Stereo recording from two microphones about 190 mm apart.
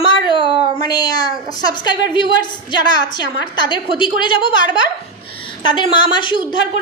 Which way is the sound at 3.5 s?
25° left (ahead or behind).